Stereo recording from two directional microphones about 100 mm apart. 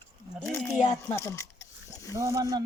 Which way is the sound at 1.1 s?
30° left (ahead or behind).